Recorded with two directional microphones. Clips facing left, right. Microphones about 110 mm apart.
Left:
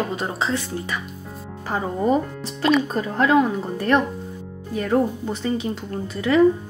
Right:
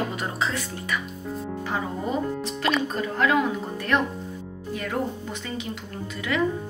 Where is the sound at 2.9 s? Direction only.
35° left (ahead or behind).